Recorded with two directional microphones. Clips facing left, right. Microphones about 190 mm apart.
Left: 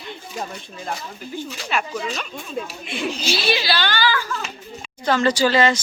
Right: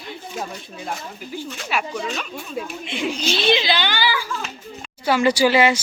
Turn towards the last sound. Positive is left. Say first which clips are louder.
# right 1 dB
turn(degrees=-10)  # may be behind; listen again after turning